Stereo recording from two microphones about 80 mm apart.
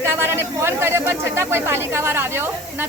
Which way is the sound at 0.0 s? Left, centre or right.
Right.